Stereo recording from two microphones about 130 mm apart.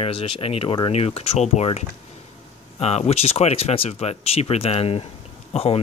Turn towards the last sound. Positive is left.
turn(degrees=50)  # may be behind; listen again after turning